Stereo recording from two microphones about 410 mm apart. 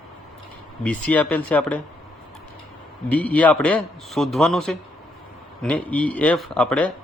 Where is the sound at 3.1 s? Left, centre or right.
Centre.